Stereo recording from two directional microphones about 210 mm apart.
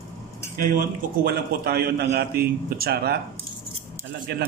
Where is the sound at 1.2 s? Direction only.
45° right (ahead or behind).